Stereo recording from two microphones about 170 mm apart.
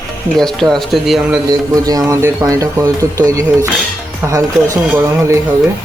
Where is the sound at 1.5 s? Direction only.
20° right (ahead or behind).